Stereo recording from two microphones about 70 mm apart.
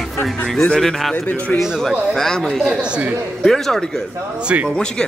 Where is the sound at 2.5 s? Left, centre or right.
Centre.